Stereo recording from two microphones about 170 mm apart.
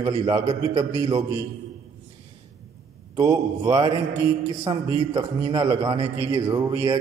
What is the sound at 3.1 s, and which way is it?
A man's voice, 25° right (ahead or behind).